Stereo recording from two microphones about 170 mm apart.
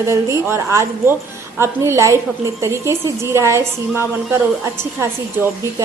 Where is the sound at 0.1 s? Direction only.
15° right (ahead or behind).